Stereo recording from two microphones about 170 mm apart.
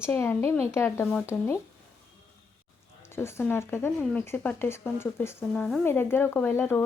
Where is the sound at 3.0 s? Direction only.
15° left (ahead or behind).